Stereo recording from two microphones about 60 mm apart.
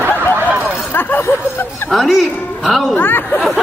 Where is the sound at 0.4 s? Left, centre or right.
Right.